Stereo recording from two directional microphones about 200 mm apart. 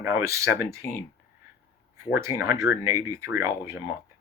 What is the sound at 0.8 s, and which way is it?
Speech, 15° left (ahead or behind).